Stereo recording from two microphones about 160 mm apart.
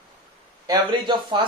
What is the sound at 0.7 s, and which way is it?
Speech, 30° right (ahead or behind).